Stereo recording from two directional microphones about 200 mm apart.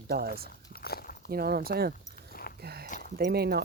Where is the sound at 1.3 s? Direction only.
50° right (ahead or behind).